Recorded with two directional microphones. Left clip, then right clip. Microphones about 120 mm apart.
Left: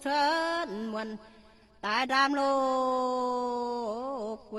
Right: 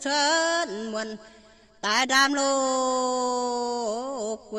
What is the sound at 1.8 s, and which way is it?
Speech, 30° right (ahead or behind).